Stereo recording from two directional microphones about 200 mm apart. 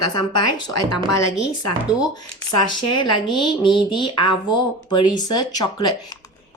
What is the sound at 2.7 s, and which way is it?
Speech, 25° left (ahead or behind).